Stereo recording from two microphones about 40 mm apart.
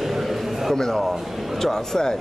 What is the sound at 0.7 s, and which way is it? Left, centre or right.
Speech, centre.